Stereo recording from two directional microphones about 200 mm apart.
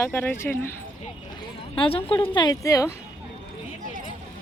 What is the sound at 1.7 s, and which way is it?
Speech, 25° left (ahead or behind).